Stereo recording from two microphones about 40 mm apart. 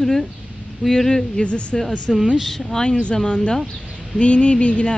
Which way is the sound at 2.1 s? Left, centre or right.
Centre.